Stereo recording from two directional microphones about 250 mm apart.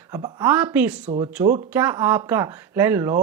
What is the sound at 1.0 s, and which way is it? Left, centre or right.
A woman's voice, centre.